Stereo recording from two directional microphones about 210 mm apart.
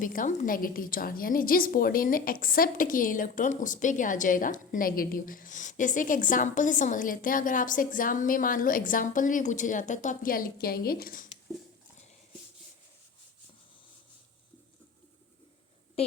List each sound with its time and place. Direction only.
0.0 s a woman's voice: 40° left (ahead or behind)
16.0 s a woman's voice: 30° left (ahead or behind)